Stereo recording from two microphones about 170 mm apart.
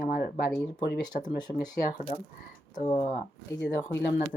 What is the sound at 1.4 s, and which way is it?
Speech, 25° left (ahead or behind).